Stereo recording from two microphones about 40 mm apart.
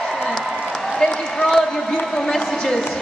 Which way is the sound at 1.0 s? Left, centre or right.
Centre.